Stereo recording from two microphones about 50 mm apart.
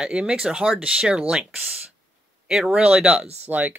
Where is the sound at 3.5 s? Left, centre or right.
Right.